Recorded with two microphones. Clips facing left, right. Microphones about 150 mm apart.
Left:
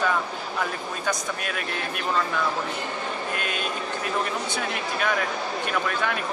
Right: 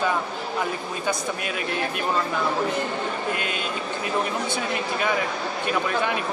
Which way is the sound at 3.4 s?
55° left (ahead or behind).